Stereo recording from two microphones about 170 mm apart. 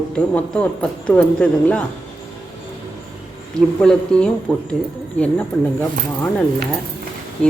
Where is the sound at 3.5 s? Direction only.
5° left (ahead or behind).